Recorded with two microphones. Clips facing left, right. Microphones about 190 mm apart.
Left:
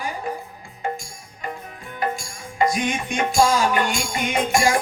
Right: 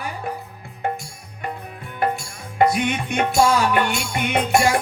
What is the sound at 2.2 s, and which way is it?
Music, 65° right (ahead or behind).